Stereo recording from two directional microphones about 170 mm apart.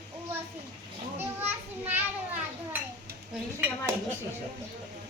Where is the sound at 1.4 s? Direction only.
10° right (ahead or behind).